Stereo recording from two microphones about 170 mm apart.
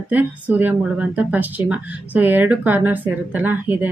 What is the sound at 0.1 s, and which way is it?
Speech, 10° right (ahead or behind).